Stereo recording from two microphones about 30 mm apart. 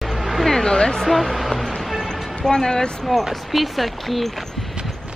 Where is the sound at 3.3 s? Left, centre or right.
Centre.